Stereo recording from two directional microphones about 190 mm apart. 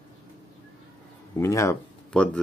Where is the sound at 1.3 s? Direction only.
15° left (ahead or behind).